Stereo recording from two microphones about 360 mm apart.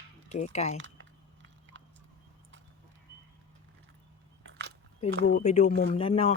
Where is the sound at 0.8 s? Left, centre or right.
Right.